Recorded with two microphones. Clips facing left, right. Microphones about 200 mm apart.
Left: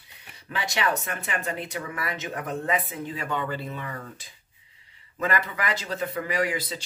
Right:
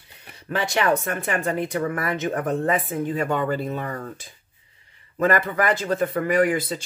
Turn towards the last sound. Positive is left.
turn(degrees=-50)  # may be behind; listen again after turning